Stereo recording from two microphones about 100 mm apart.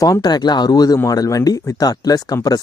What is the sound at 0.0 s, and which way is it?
Speech, 40° left (ahead or behind).